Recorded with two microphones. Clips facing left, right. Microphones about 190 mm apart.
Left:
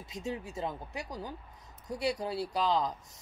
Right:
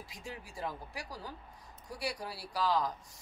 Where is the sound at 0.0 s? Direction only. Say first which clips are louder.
Left 8 dB; 25° left (ahead or behind).